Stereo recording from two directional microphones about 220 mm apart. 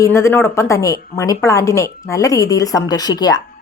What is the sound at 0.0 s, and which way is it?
Speech, 10° left (ahead or behind).